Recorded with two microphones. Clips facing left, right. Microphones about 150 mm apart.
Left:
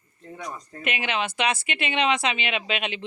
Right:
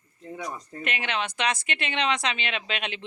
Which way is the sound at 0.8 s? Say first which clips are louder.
Left 3 dB; 5° left (ahead or behind).